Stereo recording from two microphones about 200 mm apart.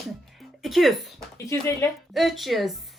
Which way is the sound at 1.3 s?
15° left (ahead or behind).